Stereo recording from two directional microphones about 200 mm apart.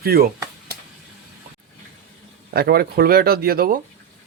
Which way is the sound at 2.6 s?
50° right (ahead or behind).